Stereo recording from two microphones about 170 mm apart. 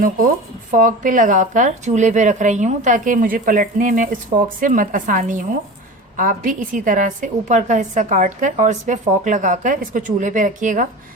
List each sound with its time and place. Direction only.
0.7 s speech: 50° right (ahead or behind)